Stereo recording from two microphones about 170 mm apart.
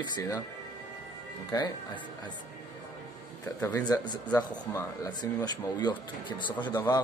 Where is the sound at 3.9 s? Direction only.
20° left (ahead or behind).